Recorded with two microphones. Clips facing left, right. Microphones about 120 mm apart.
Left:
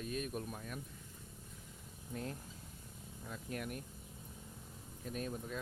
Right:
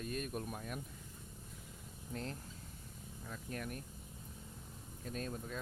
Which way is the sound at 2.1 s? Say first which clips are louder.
Even; 15° left (ahead or behind).